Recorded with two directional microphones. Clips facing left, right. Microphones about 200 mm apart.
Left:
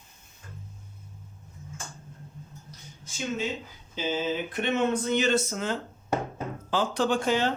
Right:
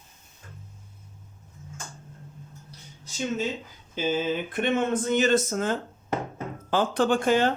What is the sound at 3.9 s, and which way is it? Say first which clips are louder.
Speech: right 3 dB; 50° right (ahead or behind).